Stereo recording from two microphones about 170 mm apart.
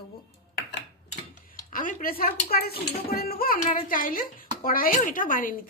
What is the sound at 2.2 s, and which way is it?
A woman's voice, 60° left (ahead or behind).